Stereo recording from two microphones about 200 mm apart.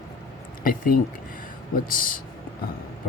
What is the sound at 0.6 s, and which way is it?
Speech, 45° left (ahead or behind).